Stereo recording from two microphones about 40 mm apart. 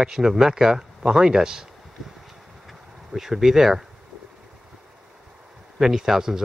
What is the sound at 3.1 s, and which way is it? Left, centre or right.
Speech, centre.